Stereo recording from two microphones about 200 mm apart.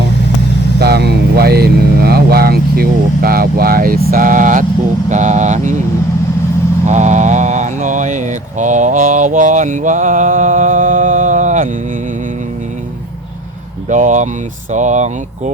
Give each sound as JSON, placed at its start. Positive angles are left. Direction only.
{"t": 0.8, "sound": "speech", "side_deg": -55}
{"t": 6.8, "sound": "mantra", "side_deg": -35}
{"t": 13.9, "sound": "speech", "side_deg": -35}